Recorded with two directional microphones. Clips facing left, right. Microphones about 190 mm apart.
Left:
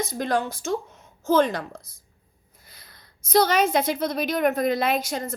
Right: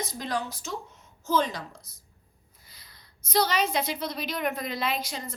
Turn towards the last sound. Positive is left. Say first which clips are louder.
# left 6 dB
turn(degrees=45)  # may be behind; listen again after turning